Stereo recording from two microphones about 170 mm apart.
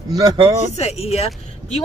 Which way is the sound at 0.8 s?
40° left (ahead or behind).